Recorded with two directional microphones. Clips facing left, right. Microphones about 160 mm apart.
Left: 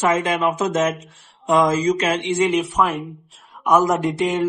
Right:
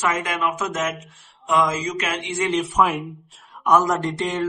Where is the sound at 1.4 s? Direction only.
35° left (ahead or behind).